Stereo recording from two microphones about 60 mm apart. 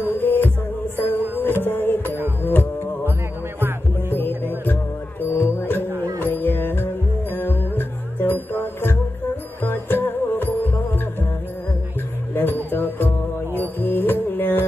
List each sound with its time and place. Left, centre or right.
0.2 s music: left
5.2 s music: left
12.4 s music: left